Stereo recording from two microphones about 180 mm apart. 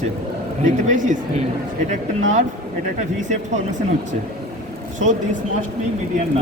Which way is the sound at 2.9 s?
40° right (ahead or behind).